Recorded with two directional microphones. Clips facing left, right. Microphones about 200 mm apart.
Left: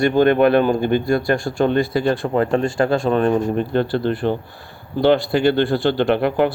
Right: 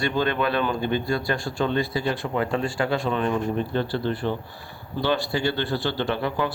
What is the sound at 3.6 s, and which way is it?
Speech, 55° left (ahead or behind).